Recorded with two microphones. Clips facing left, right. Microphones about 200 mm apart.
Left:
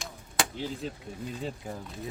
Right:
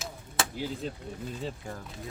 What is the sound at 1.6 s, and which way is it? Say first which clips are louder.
Speech: left 2 dB; 5° left (ahead or behind).